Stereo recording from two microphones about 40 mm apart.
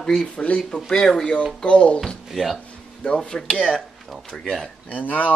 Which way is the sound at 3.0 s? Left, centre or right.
Left.